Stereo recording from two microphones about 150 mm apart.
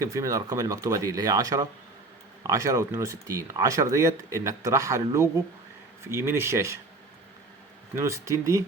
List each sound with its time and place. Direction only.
0.0 s speech: 20° right (ahead or behind)
7.9 s speech: 20° right (ahead or behind)